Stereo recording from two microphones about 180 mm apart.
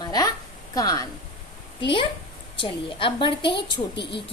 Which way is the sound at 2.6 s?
30° left (ahead or behind).